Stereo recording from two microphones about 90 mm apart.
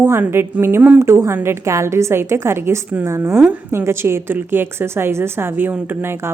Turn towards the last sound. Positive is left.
turn(degrees=-25)  # may be behind; listen again after turning